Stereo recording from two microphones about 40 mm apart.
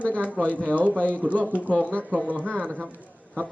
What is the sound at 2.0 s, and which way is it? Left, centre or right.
Speech, right.